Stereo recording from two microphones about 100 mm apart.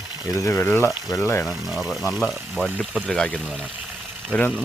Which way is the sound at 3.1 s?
5° left (ahead or behind).